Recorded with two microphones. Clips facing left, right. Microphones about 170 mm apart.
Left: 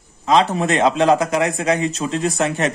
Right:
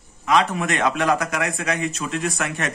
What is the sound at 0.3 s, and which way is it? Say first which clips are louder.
A man's voice: left 4 dB; 30° left (ahead or behind).